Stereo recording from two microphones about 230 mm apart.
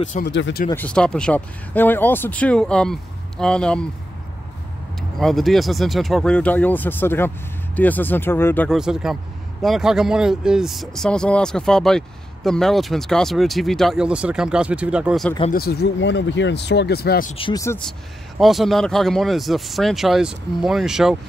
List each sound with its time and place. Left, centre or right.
0.3 s speech: left
0.7 s speech: centre
5.2 s speech: centre
15.5 s speech: left
17.4 s speech: centre
18.4 s speech: centre